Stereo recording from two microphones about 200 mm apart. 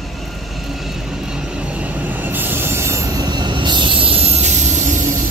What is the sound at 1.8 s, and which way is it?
Train, 10° right (ahead or behind).